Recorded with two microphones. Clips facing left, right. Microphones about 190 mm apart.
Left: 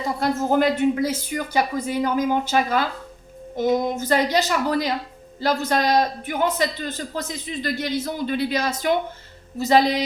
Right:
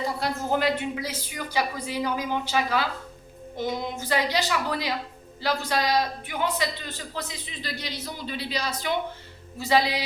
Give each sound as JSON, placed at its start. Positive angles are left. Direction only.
{"t": 0.2, "sound": "a woman's voice", "side_deg": 50}